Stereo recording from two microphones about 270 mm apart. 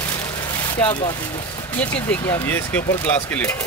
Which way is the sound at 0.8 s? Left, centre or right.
Centre.